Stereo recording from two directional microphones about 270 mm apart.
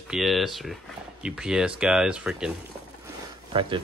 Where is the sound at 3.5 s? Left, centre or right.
Centre.